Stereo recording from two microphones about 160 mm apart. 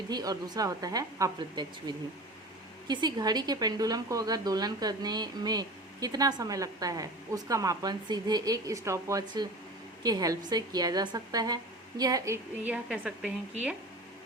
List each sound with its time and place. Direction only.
0.1 s speech: 25° right (ahead or behind)
2.8 s speech: 25° right (ahead or behind)
12.6 s a woman's voice: 5° right (ahead or behind)